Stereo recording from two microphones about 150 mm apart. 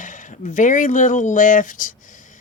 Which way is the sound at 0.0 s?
60° left (ahead or behind).